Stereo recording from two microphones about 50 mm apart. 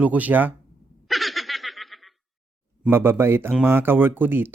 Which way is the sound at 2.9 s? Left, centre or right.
Right.